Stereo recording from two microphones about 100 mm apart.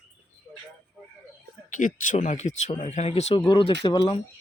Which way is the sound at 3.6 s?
70° left (ahead or behind).